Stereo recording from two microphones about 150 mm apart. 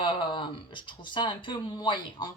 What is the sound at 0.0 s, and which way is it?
Speech, 30° left (ahead or behind).